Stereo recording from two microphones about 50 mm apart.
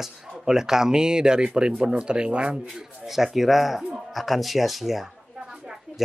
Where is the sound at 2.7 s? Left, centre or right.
Centre.